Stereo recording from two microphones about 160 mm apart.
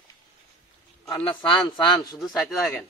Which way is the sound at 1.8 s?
25° left (ahead or behind).